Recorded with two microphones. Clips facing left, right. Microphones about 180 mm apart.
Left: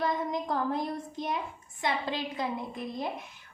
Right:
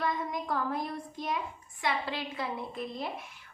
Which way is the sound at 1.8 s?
20° left (ahead or behind).